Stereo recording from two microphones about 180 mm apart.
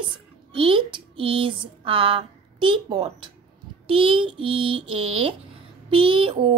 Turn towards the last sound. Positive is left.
turn(degrees=-30)  # may be behind; listen again after turning